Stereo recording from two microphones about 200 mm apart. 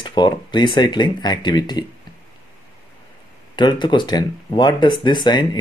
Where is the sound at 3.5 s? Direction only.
20° left (ahead or behind).